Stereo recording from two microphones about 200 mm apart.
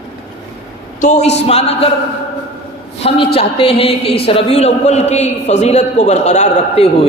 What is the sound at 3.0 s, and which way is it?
A man's voice, 30° left (ahead or behind).